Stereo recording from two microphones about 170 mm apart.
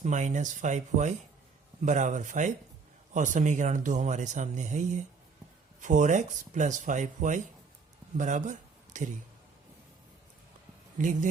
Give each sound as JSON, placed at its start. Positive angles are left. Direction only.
{"t": 0.0, "sound": "speech", "side_deg": -45}
{"t": 10.9, "sound": "speech", "side_deg": -50}